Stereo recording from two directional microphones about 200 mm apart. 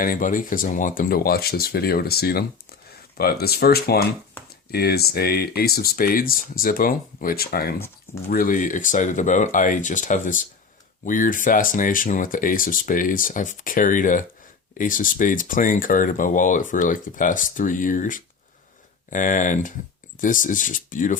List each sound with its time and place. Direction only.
0.0 s speech: 45° left (ahead or behind)